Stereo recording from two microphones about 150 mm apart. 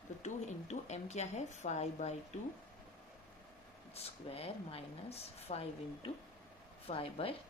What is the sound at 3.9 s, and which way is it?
A woman's voice, 40° left (ahead or behind).